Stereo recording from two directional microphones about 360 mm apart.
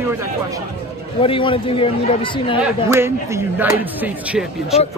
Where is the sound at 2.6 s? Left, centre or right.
Centre.